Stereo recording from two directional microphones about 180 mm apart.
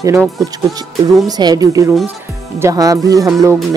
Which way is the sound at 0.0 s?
15° right (ahead or behind).